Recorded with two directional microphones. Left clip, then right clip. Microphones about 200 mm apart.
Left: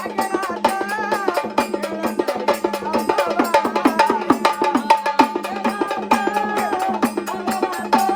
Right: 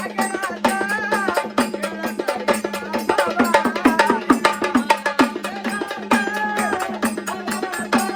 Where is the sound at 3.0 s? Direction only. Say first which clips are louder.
Right 1 dB; 25° left (ahead or behind).